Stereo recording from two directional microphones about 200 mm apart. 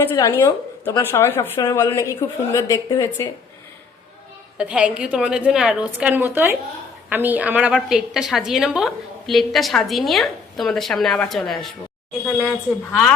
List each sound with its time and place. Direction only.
0.0 s a woman's voice: 10° left (ahead or behind)
4.5 s a woman's voice: 5° right (ahead or behind)